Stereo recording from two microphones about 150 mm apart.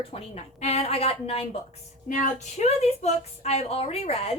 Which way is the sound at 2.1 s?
55° left (ahead or behind).